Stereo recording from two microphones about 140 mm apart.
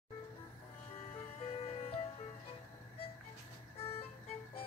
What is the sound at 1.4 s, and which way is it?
Music, 45° left (ahead or behind).